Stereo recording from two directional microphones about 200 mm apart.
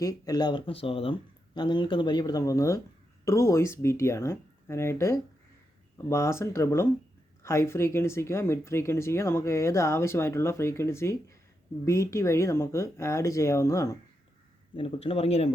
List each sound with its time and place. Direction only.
0.0 s speech: 15° left (ahead or behind)
14.8 s speech: 30° left (ahead or behind)